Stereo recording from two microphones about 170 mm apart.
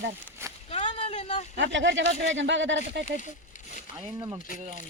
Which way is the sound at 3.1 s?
45° left (ahead or behind).